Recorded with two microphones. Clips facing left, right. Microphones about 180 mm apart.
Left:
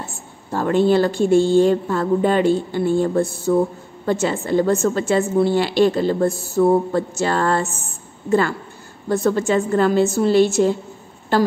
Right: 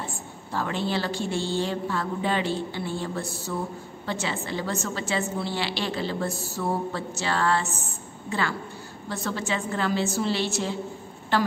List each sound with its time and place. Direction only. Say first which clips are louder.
0.0 s a woman's voice: left 1 dB; 45° left (ahead or behind)